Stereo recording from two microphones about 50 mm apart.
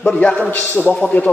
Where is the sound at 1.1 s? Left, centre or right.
Left.